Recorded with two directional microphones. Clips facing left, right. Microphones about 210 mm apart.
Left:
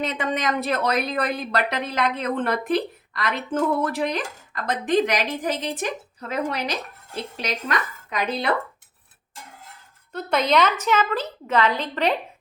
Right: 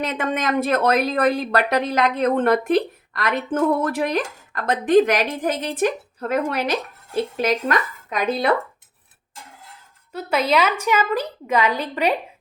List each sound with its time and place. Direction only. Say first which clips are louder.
0.0 s speech: right 2 dB; 50° right (ahead or behind)
10.1 s a woman's voice: right 1 dB; 5° right (ahead or behind)